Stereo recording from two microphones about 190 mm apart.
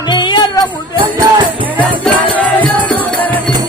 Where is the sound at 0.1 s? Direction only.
25° left (ahead or behind).